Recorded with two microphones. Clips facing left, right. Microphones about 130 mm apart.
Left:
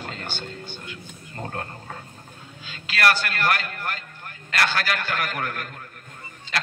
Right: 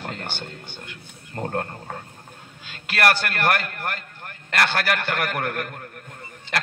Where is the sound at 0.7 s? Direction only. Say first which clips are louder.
Left 2 dB; 55° right (ahead or behind).